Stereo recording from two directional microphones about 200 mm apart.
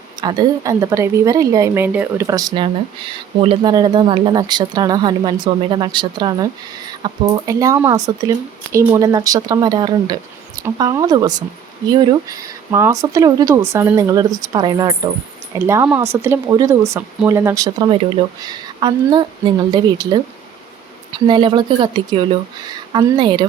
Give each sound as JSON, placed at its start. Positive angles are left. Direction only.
{"t": 0.2, "sound": "speech", "side_deg": -20}
{"t": 21.2, "sound": "speech", "side_deg": -25}